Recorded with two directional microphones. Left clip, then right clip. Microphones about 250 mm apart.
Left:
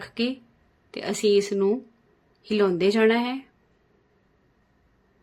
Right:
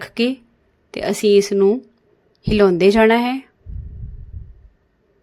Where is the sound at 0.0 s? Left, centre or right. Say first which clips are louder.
Right 8 dB; right.